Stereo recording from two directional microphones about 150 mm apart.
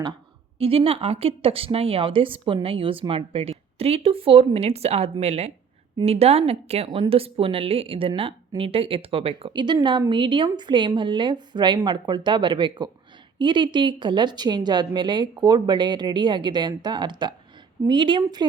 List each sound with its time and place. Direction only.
0.6 s a woman's voice: 40° right (ahead or behind)